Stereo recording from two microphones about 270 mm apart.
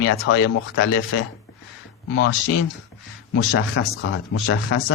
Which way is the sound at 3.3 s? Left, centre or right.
Left.